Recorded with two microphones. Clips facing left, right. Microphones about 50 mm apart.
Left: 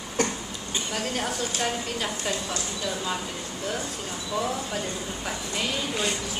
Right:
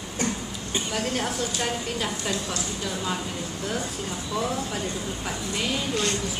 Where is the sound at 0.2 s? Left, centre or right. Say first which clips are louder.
Left 2 dB; left.